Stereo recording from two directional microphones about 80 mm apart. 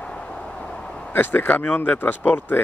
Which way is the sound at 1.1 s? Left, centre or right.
Left.